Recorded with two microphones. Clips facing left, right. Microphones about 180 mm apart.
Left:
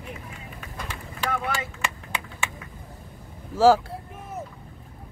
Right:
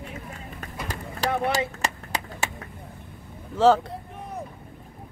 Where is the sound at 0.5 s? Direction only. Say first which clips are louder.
Right 3 dB; 40° right (ahead or behind).